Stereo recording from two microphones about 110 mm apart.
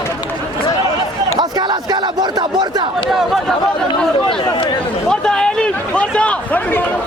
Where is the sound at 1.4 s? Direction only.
40° right (ahead or behind).